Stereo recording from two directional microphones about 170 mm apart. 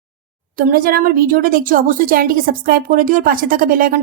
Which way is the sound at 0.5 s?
55° right (ahead or behind).